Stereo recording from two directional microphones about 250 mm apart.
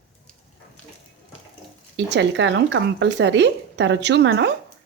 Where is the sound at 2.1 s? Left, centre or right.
Right.